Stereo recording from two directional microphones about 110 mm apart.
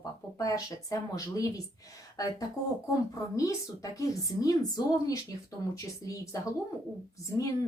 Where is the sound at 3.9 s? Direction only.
30° left (ahead or behind).